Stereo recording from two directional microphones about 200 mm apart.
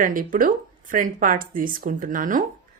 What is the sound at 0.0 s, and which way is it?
Speech, 45° right (ahead or behind).